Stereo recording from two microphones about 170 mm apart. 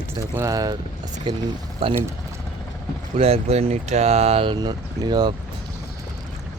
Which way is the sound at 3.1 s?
35° right (ahead or behind).